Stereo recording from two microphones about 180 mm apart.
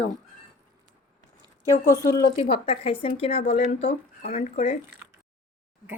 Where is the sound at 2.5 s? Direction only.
30° left (ahead or behind).